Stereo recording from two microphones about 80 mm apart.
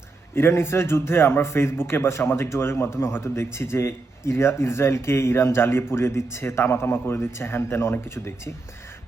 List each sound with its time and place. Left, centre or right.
0.3 s speech: left